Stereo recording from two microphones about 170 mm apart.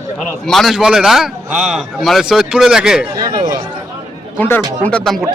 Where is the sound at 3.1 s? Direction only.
20° right (ahead or behind).